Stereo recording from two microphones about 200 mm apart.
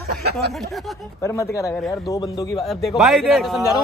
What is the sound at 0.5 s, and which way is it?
Speech, centre (ahead or behind).